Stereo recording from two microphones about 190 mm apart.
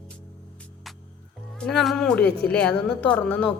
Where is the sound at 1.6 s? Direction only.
Centre (ahead or behind).